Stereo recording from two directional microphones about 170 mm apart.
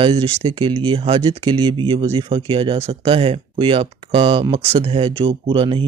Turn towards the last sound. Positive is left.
turn(degrees=-30)  # may be behind; listen again after turning